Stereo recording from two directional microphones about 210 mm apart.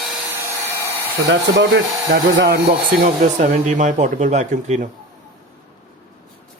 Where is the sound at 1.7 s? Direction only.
55° right (ahead or behind).